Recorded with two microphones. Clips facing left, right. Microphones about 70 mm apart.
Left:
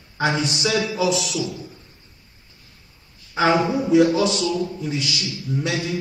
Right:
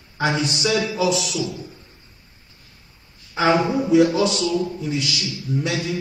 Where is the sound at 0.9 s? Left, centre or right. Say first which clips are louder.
Even; centre.